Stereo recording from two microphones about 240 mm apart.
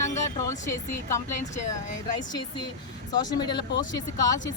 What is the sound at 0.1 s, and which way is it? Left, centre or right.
Vehicle, centre.